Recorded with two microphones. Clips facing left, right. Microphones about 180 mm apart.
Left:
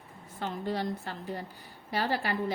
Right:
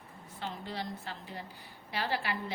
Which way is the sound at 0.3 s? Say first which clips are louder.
Left 6 dB; 50° left (ahead or behind).